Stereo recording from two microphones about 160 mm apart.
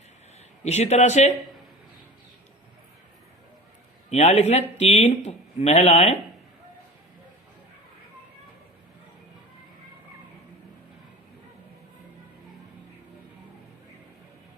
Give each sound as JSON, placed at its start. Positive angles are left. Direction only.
{"t": 0.6, "sound": "speech", "side_deg": 45}
{"t": 4.1, "sound": "speech", "side_deg": 45}